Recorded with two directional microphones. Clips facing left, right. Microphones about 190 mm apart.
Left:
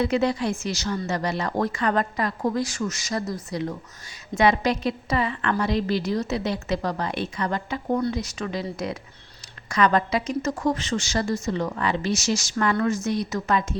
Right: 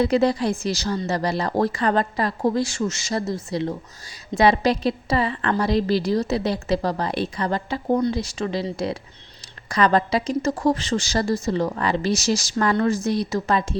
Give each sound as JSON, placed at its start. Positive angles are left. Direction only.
{"t": 0.0, "sound": "a woman's voice", "side_deg": -35}